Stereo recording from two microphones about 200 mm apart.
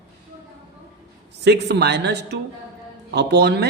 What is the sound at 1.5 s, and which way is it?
Speech, 55° right (ahead or behind).